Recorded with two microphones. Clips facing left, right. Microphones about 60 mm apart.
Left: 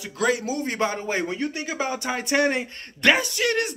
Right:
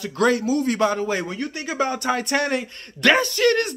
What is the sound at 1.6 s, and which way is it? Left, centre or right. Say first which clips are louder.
Speech: right 4 dB; centre.